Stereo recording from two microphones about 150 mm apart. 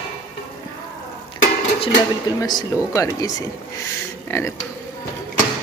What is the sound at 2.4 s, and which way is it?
A woman's voice, 25° left (ahead or behind).